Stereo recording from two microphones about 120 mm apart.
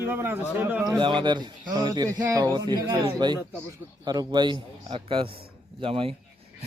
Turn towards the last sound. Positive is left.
turn(degrees=-50)  # may be behind; listen again after turning